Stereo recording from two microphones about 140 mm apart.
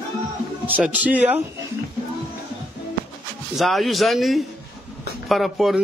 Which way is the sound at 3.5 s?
Centre (ahead or behind).